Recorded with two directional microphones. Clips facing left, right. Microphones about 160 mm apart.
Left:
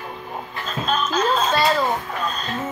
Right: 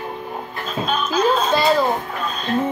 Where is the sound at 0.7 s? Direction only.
5° right (ahead or behind).